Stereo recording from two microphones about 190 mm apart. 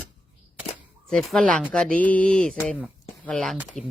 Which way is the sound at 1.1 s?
Centre (ahead or behind).